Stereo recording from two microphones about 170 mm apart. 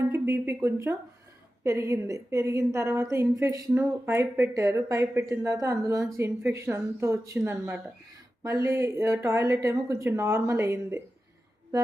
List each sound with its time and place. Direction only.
0.1 s a woman's voice: 15° right (ahead or behind)